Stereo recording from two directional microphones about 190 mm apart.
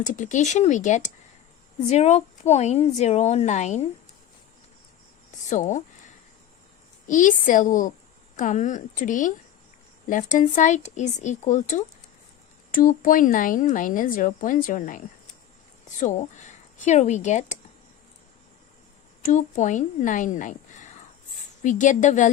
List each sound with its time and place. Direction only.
0.0 s a woman's voice: 40° left (ahead or behind)
5.5 s a woman's voice: 40° left (ahead or behind)
7.1 s a woman's voice: 40° left (ahead or behind)
19.2 s a woman's voice: 40° left (ahead or behind)